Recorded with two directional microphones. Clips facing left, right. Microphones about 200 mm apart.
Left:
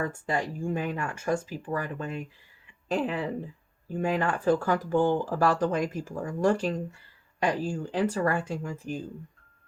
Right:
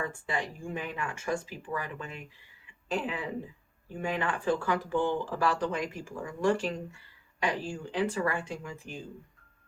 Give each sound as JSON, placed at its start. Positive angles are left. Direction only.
{"t": 0.0, "sound": "speech", "side_deg": 45}